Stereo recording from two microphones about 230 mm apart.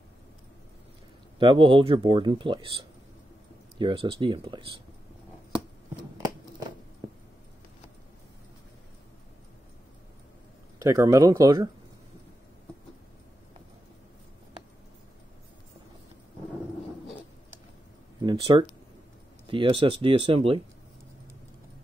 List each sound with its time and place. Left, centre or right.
1.4 s speech: right
10.8 s speech: centre
18.2 s speech: right